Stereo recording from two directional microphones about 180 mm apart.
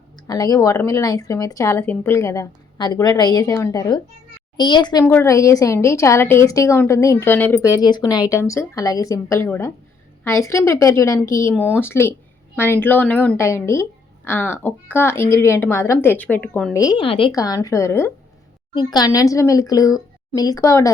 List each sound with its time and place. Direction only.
0.3 s a woman's voice: 20° left (ahead or behind)
16.7 s speech: 20° left (ahead or behind)